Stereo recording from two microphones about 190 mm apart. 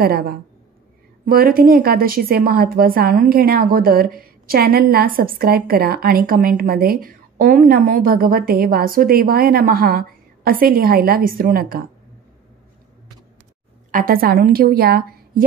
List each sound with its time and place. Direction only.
0.0 s a woman's voice: 55° right (ahead or behind)
13.9 s a woman's voice: 50° right (ahead or behind)